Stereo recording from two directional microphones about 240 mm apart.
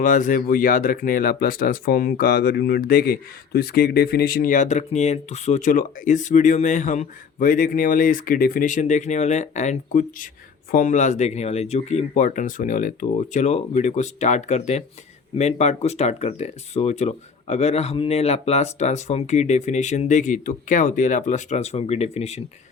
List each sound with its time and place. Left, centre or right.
0.0 s speech: left